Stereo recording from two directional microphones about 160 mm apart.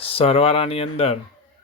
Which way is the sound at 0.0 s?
35° left (ahead or behind).